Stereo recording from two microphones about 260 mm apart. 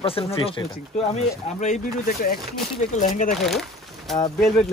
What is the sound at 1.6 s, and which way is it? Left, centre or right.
Speech, left.